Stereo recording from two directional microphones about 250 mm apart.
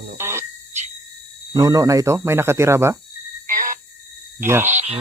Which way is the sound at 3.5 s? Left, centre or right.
Right.